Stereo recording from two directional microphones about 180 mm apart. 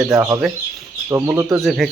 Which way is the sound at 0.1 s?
15° right (ahead or behind).